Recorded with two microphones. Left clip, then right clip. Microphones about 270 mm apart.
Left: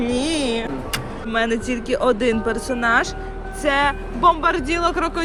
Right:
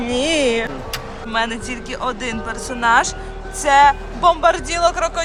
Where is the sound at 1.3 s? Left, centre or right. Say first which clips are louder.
Even; centre.